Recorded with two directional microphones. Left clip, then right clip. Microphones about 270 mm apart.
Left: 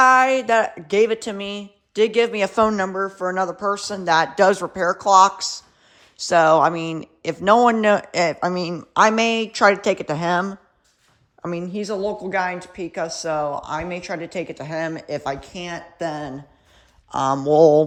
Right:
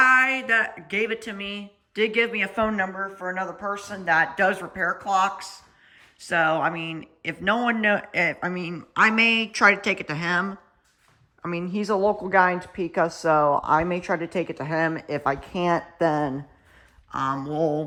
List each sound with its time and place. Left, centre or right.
0.0 s speech: centre
3.2 s speech: right
3.8 s a woman's voice: centre
17.1 s speech: centre